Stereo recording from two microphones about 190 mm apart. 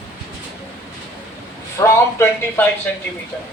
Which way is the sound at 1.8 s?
10° left (ahead or behind).